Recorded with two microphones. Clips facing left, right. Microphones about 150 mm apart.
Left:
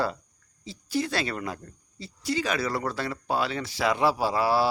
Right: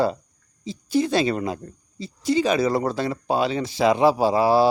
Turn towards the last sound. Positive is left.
turn(degrees=-20)  # may be behind; listen again after turning